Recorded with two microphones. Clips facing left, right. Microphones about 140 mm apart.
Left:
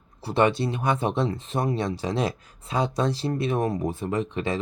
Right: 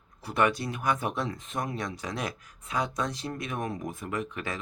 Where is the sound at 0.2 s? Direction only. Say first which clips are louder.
Left 5 dB; 30° left (ahead or behind).